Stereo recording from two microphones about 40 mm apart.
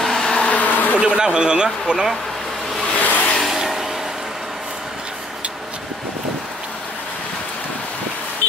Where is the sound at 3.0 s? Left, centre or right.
Left.